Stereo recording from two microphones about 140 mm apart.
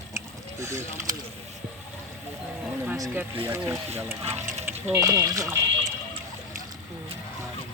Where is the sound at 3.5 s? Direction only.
15° right (ahead or behind).